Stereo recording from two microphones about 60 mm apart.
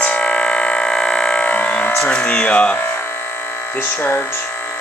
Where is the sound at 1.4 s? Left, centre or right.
Left.